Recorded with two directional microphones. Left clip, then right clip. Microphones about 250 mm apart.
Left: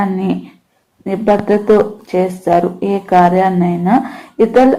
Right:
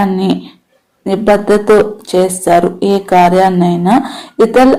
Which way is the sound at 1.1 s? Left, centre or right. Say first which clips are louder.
Right 3 dB; right.